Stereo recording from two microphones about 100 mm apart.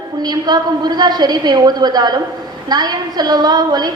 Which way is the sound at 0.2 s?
45° right (ahead or behind).